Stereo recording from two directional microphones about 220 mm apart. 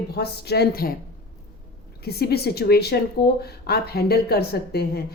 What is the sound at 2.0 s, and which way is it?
A woman's voice, 45° left (ahead or behind).